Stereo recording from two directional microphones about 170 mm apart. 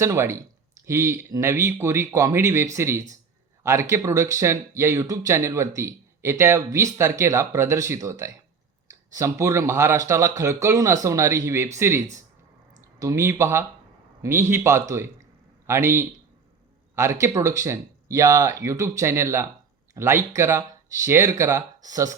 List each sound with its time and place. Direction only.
0.0 s speech: 15° right (ahead or behind)